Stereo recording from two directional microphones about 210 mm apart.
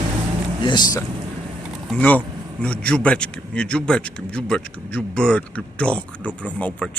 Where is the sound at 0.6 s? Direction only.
20° left (ahead or behind).